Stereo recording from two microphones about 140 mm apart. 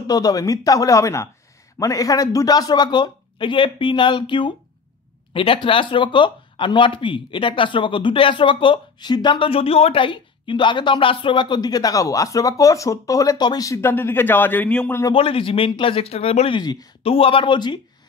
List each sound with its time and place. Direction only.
0.0 s speech: 25° left (ahead or behind); by 15.0 s 10° left (ahead or behind)
15.1 s speech: 40° left (ahead or behind)